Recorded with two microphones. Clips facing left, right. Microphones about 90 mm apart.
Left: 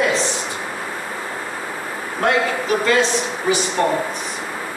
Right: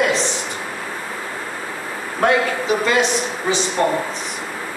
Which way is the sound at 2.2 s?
15° right (ahead or behind).